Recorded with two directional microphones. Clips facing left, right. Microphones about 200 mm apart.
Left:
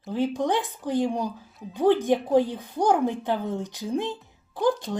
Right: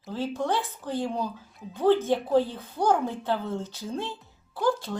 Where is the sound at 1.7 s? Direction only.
15° left (ahead or behind).